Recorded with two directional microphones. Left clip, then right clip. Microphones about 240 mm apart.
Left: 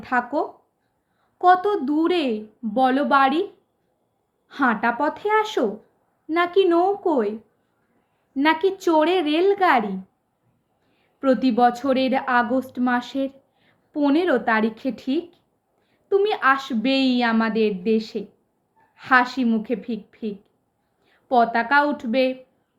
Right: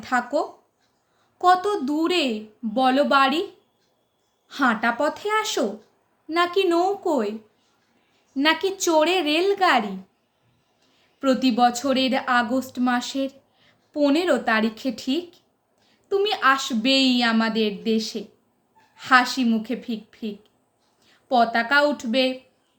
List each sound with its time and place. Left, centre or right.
0.0 s speech: right
4.4 s speech: right
8.4 s speech: right
11.2 s speech: right